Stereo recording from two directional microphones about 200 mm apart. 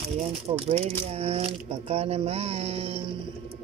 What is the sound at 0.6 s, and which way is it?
Speech, 30° right (ahead or behind).